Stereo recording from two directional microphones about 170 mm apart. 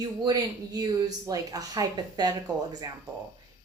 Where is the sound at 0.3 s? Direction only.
20° right (ahead or behind).